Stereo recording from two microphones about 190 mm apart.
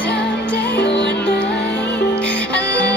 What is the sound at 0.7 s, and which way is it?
Music, 60° left (ahead or behind).